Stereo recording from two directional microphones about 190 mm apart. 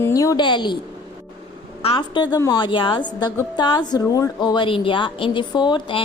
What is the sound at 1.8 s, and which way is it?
A woman's voice, 25° left (ahead or behind).